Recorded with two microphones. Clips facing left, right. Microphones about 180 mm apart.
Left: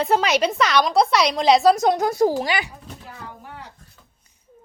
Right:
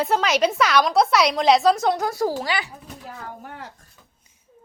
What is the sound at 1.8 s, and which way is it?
Speech, 20° left (ahead or behind).